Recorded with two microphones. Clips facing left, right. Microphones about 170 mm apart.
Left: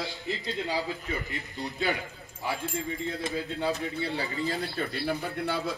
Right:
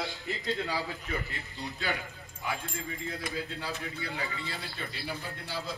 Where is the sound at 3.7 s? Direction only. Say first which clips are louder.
Left 7 dB; 30° left (ahead or behind).